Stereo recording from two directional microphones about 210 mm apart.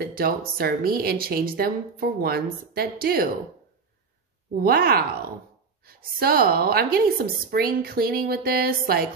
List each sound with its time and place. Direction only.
0.0 s speech: 45° right (ahead or behind)
4.6 s speech: 45° right (ahead or behind)